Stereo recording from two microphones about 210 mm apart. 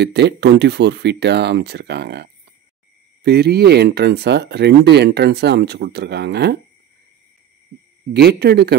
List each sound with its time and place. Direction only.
0.0 s speech: 55° right (ahead or behind)
3.3 s speech: 50° right (ahead or behind)
8.1 s speech: 50° right (ahead or behind)